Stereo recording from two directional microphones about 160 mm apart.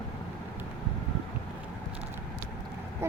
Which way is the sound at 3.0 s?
15° right (ahead or behind).